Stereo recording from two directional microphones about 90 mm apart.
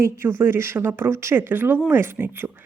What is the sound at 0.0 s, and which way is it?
Speech, 25° right (ahead or behind).